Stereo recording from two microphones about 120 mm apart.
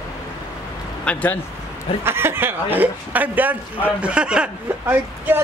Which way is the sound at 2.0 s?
20° right (ahead or behind).